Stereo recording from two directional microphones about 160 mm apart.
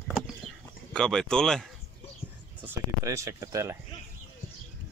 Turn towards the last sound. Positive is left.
turn(degrees=-20)  # may be behind; listen again after turning